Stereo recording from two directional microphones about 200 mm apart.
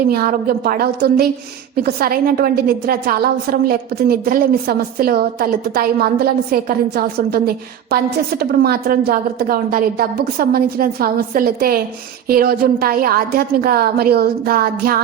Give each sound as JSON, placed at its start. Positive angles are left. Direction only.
{"t": 0.1, "sound": "a woman's voice", "side_deg": -50}